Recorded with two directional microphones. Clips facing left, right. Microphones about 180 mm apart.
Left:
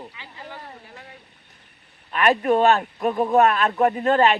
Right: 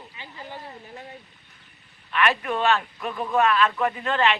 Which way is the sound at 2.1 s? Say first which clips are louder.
Left 6 dB; 40° left (ahead or behind).